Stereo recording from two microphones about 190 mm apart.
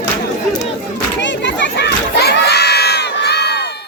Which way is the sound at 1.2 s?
70° left (ahead or behind).